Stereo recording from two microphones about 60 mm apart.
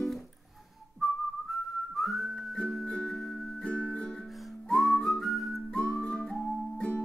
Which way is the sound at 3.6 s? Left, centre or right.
Centre.